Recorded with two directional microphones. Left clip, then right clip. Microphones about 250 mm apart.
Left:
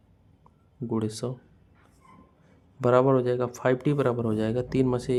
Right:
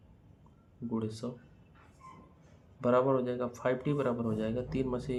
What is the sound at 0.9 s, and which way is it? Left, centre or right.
Speech, left.